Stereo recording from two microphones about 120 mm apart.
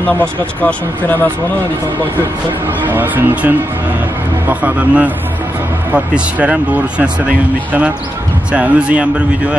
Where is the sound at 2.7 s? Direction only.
15° right (ahead or behind).